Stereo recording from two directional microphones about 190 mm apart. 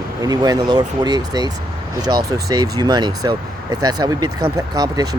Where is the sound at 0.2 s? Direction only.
20° right (ahead or behind).